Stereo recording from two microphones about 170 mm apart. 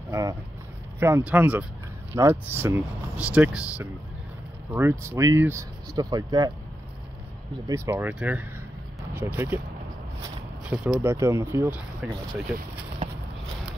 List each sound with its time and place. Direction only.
0.1 s vehicle: 20° right (ahead or behind)
0.9 s speech: 15° right (ahead or behind)
7.6 s speech: 15° right (ahead or behind)
10.7 s speech: 10° right (ahead or behind)